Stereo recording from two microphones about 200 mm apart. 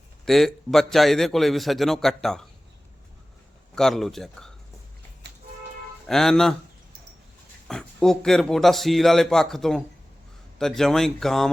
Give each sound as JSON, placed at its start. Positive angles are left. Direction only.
{"t": 0.3, "sound": "a man's voice", "side_deg": 0}
{"t": 3.8, "sound": "a man's voice", "side_deg": 0}
{"t": 5.2, "sound": "music", "side_deg": -60}
{"t": 6.1, "sound": "a man's voice", "side_deg": 0}
{"t": 7.7, "sound": "a man's voice", "side_deg": 5}